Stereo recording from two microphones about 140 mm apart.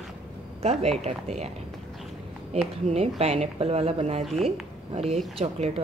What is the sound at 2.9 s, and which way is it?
A woman's voice, 50° right (ahead or behind).